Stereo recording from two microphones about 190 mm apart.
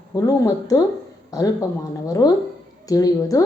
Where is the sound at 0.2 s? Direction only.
15° left (ahead or behind).